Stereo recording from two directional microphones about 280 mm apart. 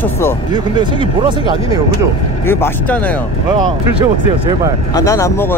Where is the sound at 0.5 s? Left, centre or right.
Centre.